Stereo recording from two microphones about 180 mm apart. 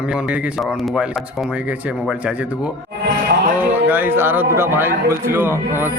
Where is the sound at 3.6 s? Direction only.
10° right (ahead or behind).